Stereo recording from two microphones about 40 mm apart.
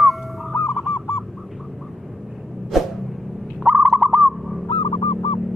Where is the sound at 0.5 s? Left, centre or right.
Left.